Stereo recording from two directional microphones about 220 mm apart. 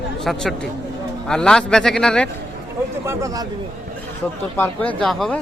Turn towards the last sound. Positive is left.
turn(degrees=0)  # may be behind; listen again after turning